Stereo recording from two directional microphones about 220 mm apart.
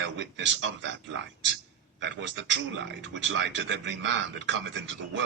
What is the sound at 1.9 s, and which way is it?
Speech, 55° right (ahead or behind).